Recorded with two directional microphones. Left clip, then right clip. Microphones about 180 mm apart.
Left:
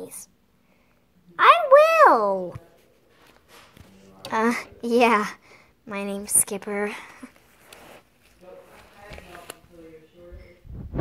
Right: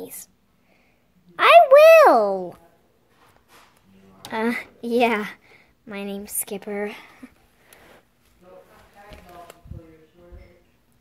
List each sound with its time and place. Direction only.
0.0 s speech: 15° right (ahead or behind)
1.3 s a sound: 25° right (ahead or behind)
4.3 s a woman's voice: 5° right (ahead or behind)